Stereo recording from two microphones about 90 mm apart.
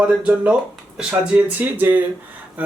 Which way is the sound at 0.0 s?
10° right (ahead or behind).